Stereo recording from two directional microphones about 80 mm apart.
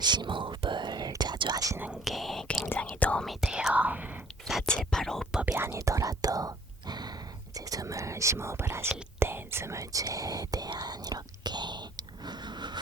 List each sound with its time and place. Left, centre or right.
0.0 s whispering: right
2.0 s whispering: centre
2.6 s whispering: centre
3.7 s whispering: centre
4.9 s whispering: centre
5.3 s whispering: centre
5.5 s whispering: right
7.5 s whispering: right
8.9 s speech: right
10.8 s whispering: right